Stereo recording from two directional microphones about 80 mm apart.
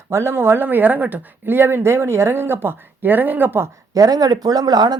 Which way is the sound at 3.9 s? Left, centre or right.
Right.